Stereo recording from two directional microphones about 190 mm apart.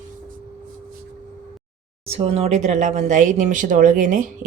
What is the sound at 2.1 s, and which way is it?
Speech, 30° right (ahead or behind).